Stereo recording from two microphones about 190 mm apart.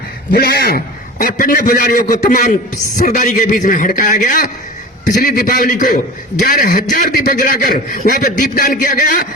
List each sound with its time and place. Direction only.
0.3 s a man's voice: 55° left (ahead or behind)